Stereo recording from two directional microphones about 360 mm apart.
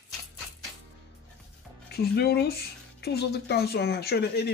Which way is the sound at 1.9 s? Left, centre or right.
Left.